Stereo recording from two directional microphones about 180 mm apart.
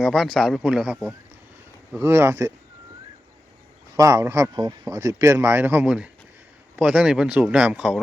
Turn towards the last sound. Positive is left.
turn(degrees=-5)  # may be behind; listen again after turning